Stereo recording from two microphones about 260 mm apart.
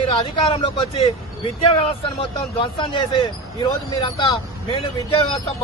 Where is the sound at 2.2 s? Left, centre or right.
Centre.